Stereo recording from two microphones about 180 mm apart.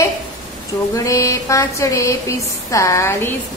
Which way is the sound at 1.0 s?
15° left (ahead or behind).